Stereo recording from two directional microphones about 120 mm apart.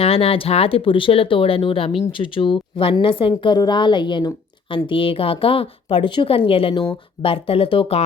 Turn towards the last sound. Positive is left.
turn(degrees=50)  # may be behind; listen again after turning